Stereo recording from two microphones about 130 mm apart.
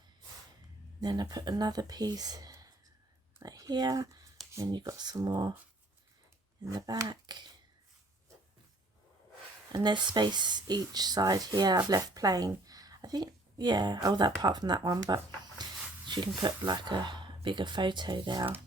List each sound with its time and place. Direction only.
1.0 s speech: 30° right (ahead or behind)
6.7 s speech: 30° right (ahead or behind)
9.7 s speech: 35° right (ahead or behind)